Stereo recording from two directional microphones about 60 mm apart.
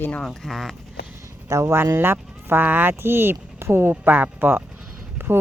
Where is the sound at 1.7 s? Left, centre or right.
Right.